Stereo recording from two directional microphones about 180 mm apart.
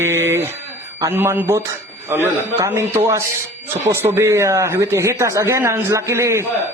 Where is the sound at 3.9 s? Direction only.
15° right (ahead or behind).